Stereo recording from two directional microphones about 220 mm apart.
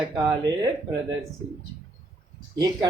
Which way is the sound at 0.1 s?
15° right (ahead or behind).